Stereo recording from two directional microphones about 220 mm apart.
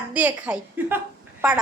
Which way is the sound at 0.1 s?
5° right (ahead or behind).